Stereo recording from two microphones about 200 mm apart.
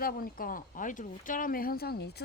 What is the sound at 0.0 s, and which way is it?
Speech, 45° left (ahead or behind).